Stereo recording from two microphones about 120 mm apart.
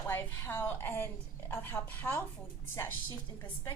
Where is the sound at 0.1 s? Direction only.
20° left (ahead or behind).